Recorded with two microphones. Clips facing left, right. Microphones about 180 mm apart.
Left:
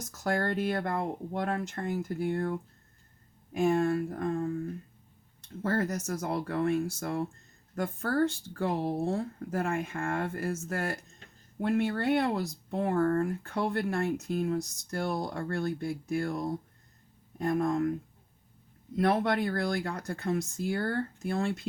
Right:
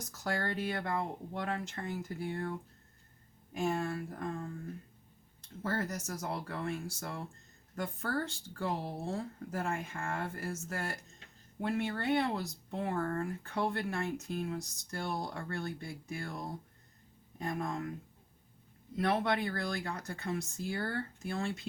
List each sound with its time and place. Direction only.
0.2 s speech: 45° left (ahead or behind)
5.6 s speech: 50° left (ahead or behind)
17.4 s speech: 50° left (ahead or behind)
18.9 s speech: 50° left (ahead or behind)